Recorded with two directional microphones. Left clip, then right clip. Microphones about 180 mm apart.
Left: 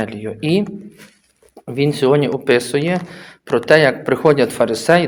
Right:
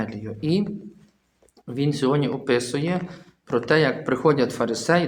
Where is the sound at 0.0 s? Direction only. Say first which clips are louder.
Left 7 dB; 20° left (ahead or behind).